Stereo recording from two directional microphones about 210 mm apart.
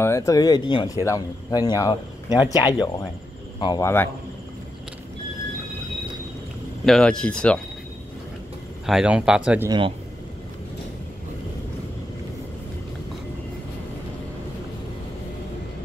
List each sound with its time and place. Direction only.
0.0 s speech: 15° left (ahead or behind)
6.9 s speech: 5° left (ahead or behind)
8.8 s speech: 5° right (ahead or behind)
9.7 s speech: 25° right (ahead or behind)